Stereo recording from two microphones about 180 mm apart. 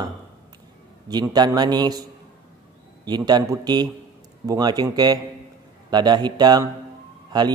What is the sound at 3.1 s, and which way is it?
A man's voice, 25° right (ahead or behind).